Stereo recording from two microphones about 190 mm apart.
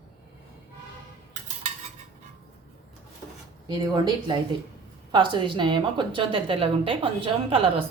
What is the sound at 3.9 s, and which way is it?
A woman's voice, 20° right (ahead or behind).